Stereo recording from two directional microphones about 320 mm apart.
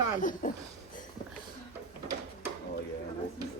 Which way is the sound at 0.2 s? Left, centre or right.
Left.